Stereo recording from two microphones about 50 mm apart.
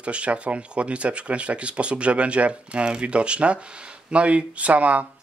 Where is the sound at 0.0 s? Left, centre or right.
Right.